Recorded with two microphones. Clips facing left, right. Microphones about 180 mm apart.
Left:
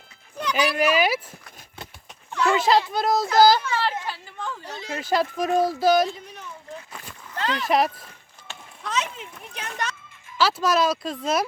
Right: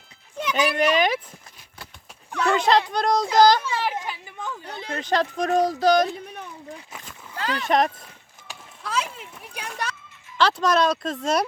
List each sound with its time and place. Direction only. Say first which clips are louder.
0.5 s speech: right 1 dB; 5° left (ahead or behind)
2.5 s speech: even; 5° left (ahead or behind)
3.6 s a sound: left 1 dB; 10° right (ahead or behind)
4.6 s speech: even; 55° right (ahead or behind)
4.9 s speech: even; 10° left (ahead or behind)
7.3 s speech: left 1 dB; 5° right (ahead or behind)
8.4 s a sound: even; 5° right (ahead or behind)
10.3 s speech: right 1 dB; 5° left (ahead or behind)